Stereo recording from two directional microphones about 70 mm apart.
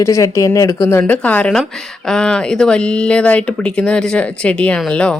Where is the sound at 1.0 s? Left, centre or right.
Left.